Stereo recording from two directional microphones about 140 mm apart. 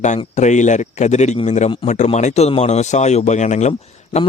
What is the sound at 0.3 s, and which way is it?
Speech, 60° left (ahead or behind).